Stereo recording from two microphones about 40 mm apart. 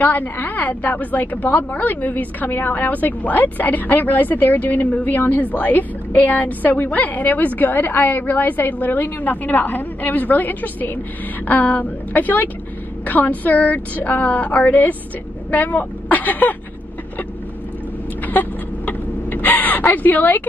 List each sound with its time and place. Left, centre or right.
0.0 s a woman's voice: left
18.2 s a sound: left
19.9 s a woman's voice: left